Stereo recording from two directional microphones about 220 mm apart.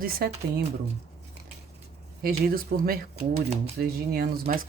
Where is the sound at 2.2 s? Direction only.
45° right (ahead or behind).